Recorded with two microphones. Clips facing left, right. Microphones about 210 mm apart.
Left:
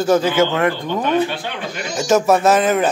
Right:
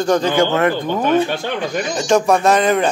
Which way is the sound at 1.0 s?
45° right (ahead or behind).